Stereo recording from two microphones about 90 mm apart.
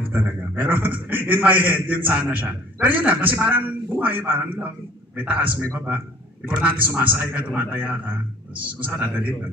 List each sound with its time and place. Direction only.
0.1 s a man's voice: 20° right (ahead or behind)